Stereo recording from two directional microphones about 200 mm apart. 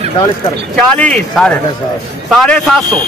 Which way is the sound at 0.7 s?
5° left (ahead or behind).